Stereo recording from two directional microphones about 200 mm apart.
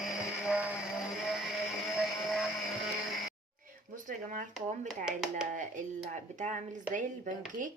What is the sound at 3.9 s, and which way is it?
Speech, 40° right (ahead or behind).